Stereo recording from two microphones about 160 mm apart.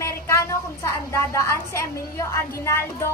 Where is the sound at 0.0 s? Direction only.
20° left (ahead or behind).